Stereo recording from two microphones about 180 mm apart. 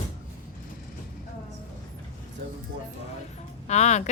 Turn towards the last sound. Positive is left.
turn(degrees=40)  # may be behind; listen again after turning